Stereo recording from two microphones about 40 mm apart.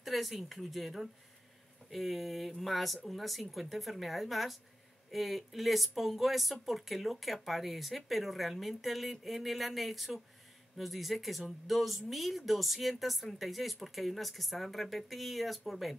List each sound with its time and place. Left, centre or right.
0.0 s speech: centre